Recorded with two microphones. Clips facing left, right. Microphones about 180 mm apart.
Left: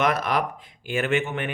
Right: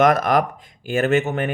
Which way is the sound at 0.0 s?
45° right (ahead or behind).